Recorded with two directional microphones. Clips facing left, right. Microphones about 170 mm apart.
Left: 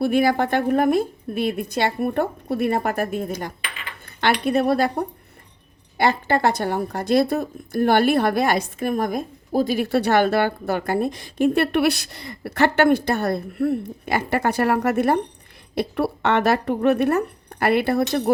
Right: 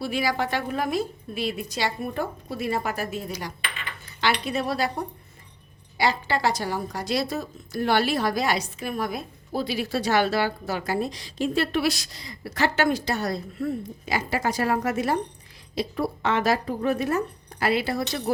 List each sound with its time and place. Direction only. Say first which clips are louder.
0.0 s a woman's voice: left 7 dB; 55° left (ahead or behind)